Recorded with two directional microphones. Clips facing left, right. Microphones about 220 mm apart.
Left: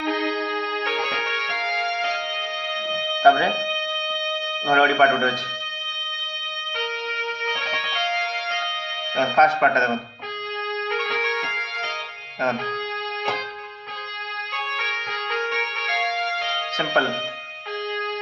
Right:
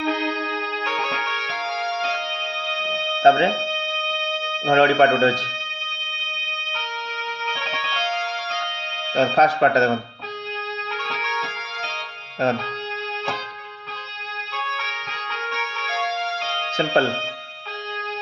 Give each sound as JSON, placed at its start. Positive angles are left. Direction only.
{"t": 0.8, "sound": "music", "side_deg": 15}
{"t": 3.2, "sound": "speech", "side_deg": -25}
{"t": 3.8, "sound": "music", "side_deg": 15}
{"t": 4.6, "sound": "speech", "side_deg": -25}
{"t": 7.4, "sound": "music", "side_deg": 15}
{"t": 9.1, "sound": "speech", "side_deg": -35}
{"t": 10.9, "sound": "music", "side_deg": 15}
{"t": 14.5, "sound": "music", "side_deg": 15}
{"t": 16.7, "sound": "speech", "side_deg": -30}